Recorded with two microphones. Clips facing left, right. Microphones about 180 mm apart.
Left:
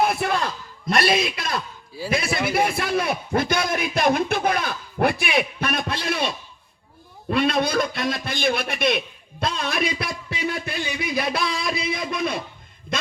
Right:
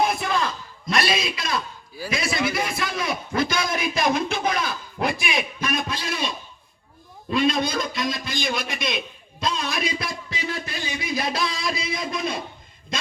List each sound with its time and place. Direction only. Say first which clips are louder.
0.1 s a man's voice: left 1 dB; 60° left (ahead or behind)